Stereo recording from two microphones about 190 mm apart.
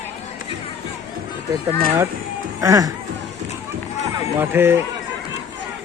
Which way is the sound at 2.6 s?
20° right (ahead or behind).